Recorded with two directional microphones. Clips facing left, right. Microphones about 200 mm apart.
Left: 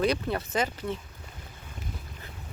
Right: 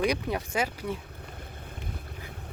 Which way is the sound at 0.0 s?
15° right (ahead or behind).